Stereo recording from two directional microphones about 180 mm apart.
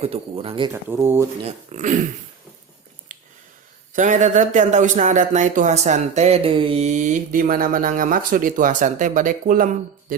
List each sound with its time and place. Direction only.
0.0 s speech: 35° right (ahead or behind)
0.7 s speech: 15° right (ahead or behind)
1.5 s speech: 40° right (ahead or behind)
3.1 s a sound: 45° right (ahead or behind)
3.9 s speech: 45° right (ahead or behind)